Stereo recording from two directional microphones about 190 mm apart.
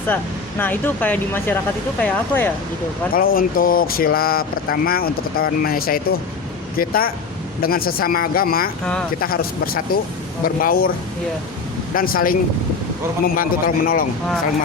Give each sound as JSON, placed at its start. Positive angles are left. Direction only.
{"t": 0.6, "sound": "speech", "side_deg": 10}
{"t": 3.1, "sound": "speech", "side_deg": 50}
{"t": 11.9, "sound": "speech", "side_deg": 50}